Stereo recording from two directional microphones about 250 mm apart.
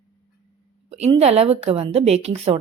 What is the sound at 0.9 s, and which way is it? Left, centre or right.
Speech, right.